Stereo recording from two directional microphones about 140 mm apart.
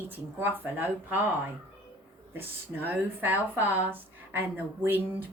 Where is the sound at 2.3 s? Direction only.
15° right (ahead or behind).